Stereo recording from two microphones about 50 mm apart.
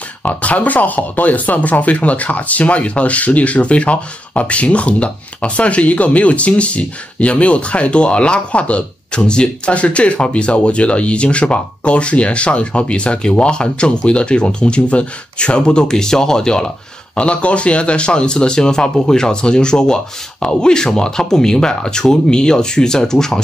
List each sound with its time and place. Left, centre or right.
0.2 s speech: left; by 23.4 s centre